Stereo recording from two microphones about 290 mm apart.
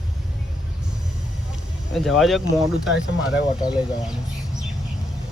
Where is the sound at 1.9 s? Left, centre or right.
Centre.